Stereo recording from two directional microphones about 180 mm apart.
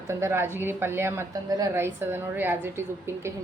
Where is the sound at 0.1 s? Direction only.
15° right (ahead or behind).